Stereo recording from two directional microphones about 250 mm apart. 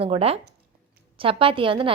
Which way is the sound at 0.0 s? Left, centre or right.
Right.